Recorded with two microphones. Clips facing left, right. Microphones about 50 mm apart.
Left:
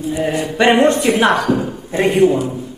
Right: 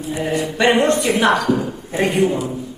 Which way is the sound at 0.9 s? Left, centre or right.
Left.